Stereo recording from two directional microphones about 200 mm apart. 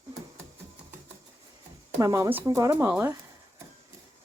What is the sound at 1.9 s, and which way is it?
Speech, 15° right (ahead or behind).